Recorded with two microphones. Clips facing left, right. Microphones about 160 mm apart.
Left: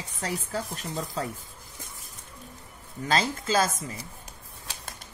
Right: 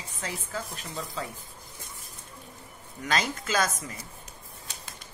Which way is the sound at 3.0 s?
30° left (ahead or behind).